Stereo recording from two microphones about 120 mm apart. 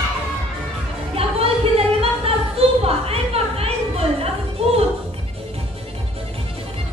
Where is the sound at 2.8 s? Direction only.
55° right (ahead or behind).